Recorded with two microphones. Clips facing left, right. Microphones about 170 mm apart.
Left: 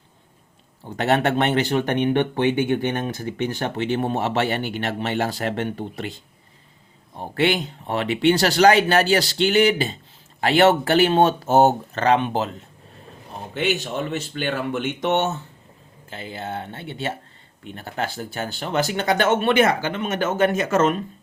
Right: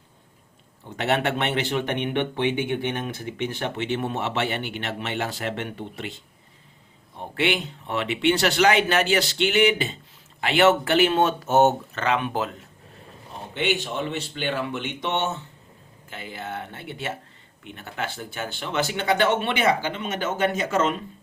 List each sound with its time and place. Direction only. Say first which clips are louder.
0.9 s speech: left 4 dB; 40° left (ahead or behind)
7.2 s speech: left 4 dB; 35° left (ahead or behind)
13.5 s speech: left 2 dB; 45° left (ahead or behind)
16.0 s speech: left 3 dB; 30° left (ahead or behind); by 20.9 s 45° left (ahead or behind)